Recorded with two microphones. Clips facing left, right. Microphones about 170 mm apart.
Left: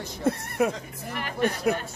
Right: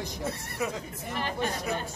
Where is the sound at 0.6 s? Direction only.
55° left (ahead or behind).